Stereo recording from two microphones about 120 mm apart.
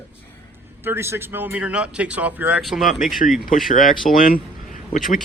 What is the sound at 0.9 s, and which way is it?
Speech, 20° right (ahead or behind).